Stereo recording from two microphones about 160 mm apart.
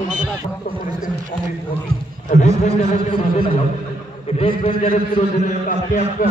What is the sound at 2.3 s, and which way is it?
A man's voice, 45° left (ahead or behind).